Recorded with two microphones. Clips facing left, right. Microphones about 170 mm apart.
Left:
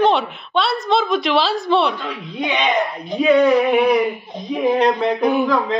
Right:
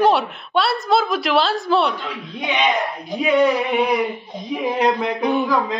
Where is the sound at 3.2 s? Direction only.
20° right (ahead or behind).